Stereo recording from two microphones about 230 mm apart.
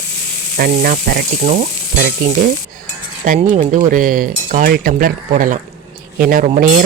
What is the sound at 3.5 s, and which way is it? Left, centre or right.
Speech, right.